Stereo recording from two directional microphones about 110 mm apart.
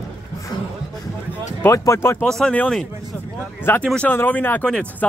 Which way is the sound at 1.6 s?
25° left (ahead or behind).